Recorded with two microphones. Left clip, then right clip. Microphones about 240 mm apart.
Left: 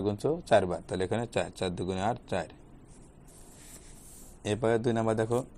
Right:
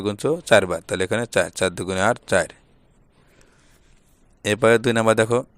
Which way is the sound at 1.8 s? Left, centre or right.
Right.